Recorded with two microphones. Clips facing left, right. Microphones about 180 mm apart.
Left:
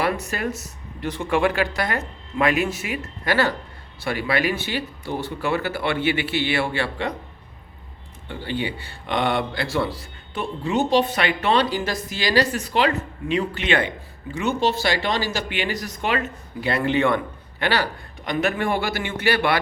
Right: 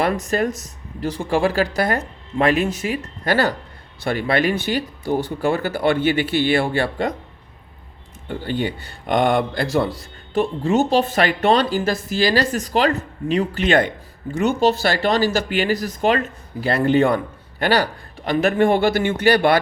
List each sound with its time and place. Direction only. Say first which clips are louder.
0.0 s speech: right 4 dB; 40° right (ahead or behind)
8.3 s speech: right 4 dB; 45° right (ahead or behind)